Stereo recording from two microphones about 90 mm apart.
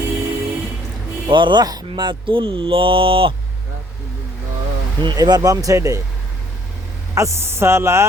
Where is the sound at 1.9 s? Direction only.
70° right (ahead or behind); by 3.3 s 90° right.